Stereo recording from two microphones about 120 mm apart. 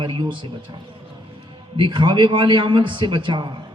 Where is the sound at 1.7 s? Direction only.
45° right (ahead or behind).